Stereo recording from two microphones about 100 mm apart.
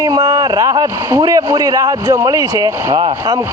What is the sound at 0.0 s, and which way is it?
Speech, 35° right (ahead or behind).